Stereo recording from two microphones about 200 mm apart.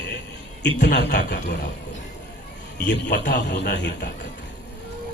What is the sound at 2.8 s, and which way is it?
A man's voice, 55° left (ahead or behind).